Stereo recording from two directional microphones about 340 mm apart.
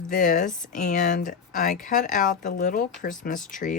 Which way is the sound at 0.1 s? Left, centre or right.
Left.